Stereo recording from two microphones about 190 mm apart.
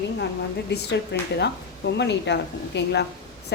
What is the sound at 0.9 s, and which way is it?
A woman's voice, 65° left (ahead or behind).